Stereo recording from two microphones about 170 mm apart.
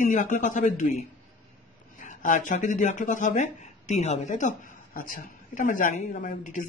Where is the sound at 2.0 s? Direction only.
50° left (ahead or behind).